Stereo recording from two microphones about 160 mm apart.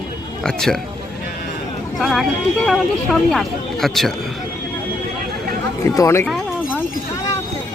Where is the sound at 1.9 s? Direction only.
Centre (ahead or behind).